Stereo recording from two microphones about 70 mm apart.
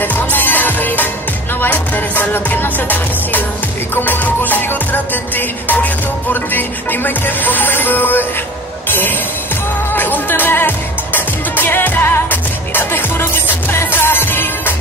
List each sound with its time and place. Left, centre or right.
0.0 s music: left